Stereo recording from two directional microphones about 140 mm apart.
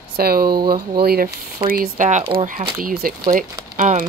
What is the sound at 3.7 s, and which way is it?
Speech, 70° right (ahead or behind).